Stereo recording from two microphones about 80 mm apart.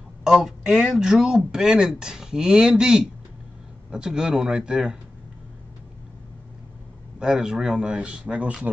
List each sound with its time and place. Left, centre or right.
0.2 s speech: centre
7.2 s speech: centre